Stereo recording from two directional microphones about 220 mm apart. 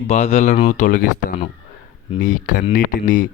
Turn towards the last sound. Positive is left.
turn(degrees=35)  # may be behind; listen again after turning